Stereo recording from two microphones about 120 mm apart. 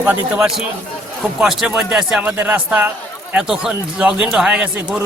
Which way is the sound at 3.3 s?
5° right (ahead or behind).